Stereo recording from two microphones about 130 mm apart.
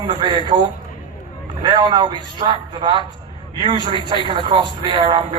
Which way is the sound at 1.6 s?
35° right (ahead or behind).